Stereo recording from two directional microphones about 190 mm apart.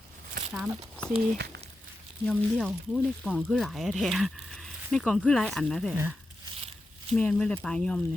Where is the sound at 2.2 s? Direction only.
5° left (ahead or behind).